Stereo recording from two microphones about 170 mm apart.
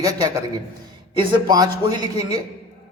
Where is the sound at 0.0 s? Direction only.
20° right (ahead or behind).